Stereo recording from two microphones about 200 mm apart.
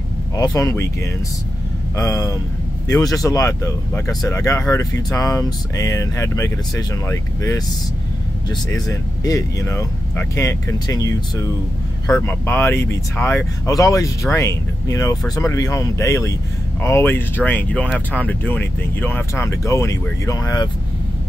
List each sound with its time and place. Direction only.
0.4 s speech: 15° left (ahead or behind)
2.0 s speech: 15° left (ahead or behind)